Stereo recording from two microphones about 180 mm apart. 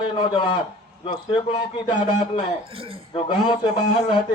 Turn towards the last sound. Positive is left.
turn(degrees=25)  # may be behind; listen again after turning